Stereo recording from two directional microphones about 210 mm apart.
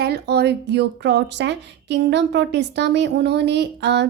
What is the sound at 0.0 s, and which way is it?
A woman's voice, 50° right (ahead or behind).